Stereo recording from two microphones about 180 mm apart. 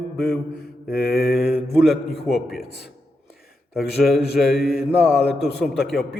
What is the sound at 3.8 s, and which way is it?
Speech, centre (ahead or behind).